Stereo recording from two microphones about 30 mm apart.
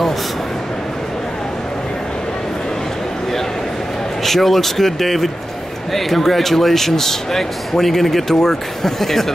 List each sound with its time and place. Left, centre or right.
4.2 s speech: centre